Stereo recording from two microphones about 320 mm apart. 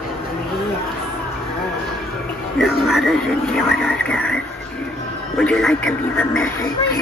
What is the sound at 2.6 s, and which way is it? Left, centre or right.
Speech, centre.